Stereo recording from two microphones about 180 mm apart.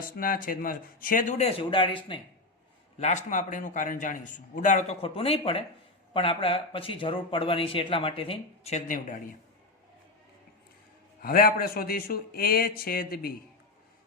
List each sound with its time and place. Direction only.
0.0 s a man's voice: 50° left (ahead or behind); by 2.0 s 30° left (ahead or behind)
3.0 s a man's voice: 40° left (ahead or behind)
11.2 s speech: 55° left (ahead or behind)